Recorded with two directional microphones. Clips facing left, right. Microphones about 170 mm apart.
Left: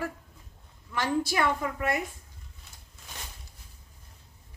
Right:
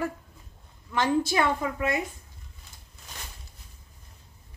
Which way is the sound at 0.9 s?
25° right (ahead or behind).